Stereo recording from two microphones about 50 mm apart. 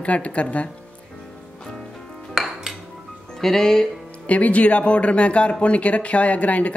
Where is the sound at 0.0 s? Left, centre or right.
Left.